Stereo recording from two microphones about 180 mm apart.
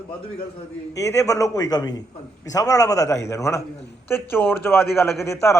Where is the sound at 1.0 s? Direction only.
20° left (ahead or behind).